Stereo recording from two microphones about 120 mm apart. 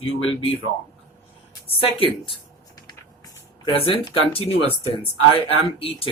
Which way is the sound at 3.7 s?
50° left (ahead or behind).